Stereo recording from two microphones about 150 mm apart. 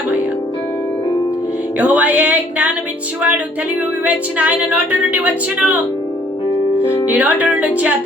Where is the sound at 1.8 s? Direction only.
10° right (ahead or behind).